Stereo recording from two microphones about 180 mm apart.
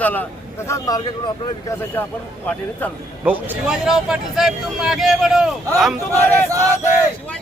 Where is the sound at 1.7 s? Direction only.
10° left (ahead or behind).